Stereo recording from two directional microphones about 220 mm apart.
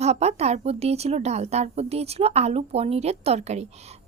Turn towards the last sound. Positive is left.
turn(degrees=-30)  # may be behind; listen again after turning